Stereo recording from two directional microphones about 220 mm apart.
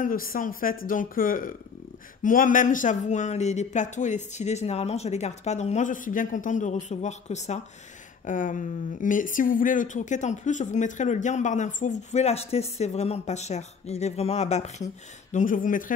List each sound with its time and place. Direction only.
0.0 s speech: 40° left (ahead or behind)